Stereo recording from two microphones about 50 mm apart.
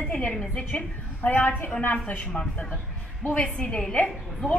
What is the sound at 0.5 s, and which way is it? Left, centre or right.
A woman's voice, left.